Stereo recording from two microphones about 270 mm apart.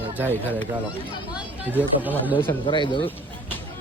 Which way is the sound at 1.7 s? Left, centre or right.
Centre.